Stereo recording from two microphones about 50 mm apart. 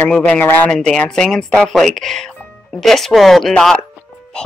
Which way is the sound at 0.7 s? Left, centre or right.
Centre.